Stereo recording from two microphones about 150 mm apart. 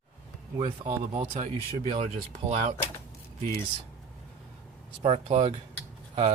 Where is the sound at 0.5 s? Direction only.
30° right (ahead or behind).